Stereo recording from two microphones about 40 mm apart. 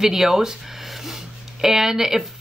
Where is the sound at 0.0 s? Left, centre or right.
Centre.